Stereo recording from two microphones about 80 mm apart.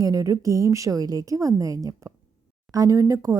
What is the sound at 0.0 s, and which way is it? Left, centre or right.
A woman's voice, right.